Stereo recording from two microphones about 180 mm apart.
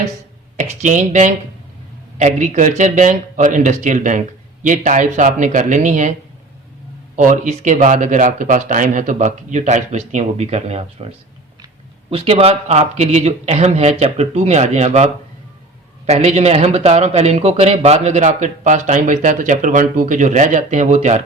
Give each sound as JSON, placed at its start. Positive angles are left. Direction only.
{"t": 0.5, "sound": "speech", "side_deg": -40}
{"t": 7.2, "sound": "speech", "side_deg": -45}
{"t": 12.1, "sound": "speech", "side_deg": -35}